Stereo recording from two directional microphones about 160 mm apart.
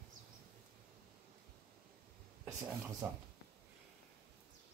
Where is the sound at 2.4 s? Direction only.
15° right (ahead or behind).